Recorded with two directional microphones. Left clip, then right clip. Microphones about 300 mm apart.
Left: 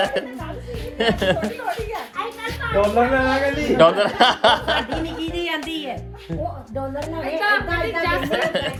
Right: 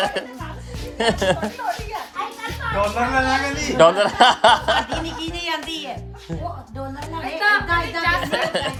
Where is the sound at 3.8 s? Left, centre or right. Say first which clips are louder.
Right 2 dB; right.